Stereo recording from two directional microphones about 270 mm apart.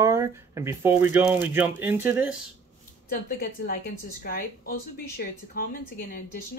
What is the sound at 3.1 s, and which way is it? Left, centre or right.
A woman's voice, left.